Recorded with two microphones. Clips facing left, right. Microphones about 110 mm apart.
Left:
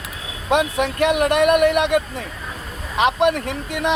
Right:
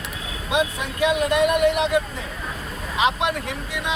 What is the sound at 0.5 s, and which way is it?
Speech, 65° left (ahead or behind).